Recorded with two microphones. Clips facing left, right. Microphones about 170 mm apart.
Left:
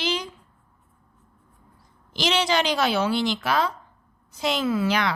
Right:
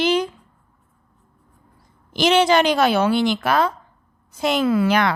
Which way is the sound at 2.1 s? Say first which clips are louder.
Right 7 dB; 55° right (ahead or behind).